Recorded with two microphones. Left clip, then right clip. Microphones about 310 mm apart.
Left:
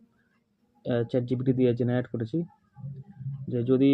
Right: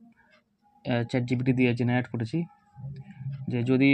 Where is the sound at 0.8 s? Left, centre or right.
Right.